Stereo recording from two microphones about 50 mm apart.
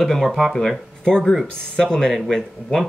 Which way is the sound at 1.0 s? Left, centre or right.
Centre.